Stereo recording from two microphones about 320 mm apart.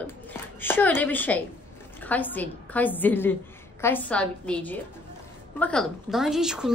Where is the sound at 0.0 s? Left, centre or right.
Centre.